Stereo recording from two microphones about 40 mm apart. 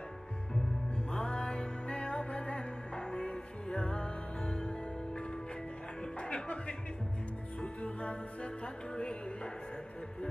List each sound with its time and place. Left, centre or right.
1.1 s music: left